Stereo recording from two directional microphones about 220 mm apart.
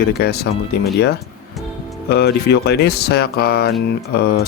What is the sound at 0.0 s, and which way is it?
Speech, 45° left (ahead or behind).